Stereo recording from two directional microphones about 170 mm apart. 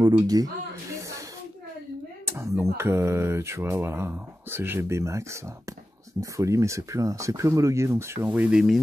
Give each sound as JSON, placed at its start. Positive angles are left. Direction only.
{"t": 0.0, "sound": "speech", "side_deg": -20}
{"t": 0.9, "sound": "snake", "side_deg": -20}
{"t": 2.2, "sound": "speech", "side_deg": -15}